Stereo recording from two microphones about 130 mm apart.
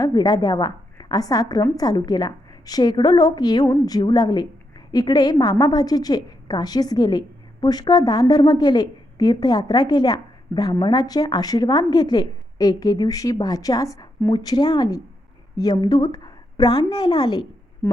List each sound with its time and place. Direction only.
0.0 s a woman's voice: 35° left (ahead or behind)